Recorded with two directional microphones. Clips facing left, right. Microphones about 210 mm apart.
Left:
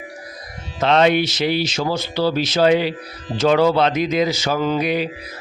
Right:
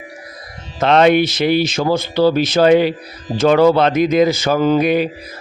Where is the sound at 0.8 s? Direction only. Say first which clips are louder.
Right 4 dB; 55° right (ahead or behind).